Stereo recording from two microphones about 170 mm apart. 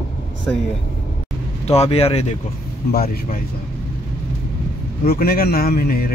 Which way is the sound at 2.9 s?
60° left (ahead or behind).